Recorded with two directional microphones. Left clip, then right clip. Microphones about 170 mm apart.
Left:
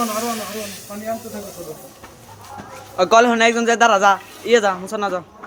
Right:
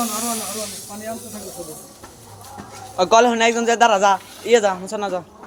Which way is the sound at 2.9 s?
15° left (ahead or behind).